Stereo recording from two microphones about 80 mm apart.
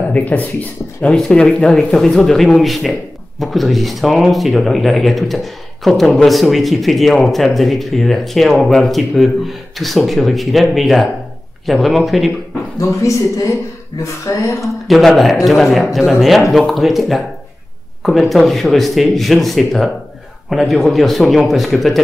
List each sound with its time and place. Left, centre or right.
0.1 s speech: centre
1.1 s speech: centre
12.8 s speech: left
14.6 s speech: centre